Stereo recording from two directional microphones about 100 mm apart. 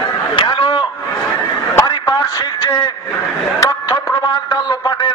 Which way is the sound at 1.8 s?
30° left (ahead or behind).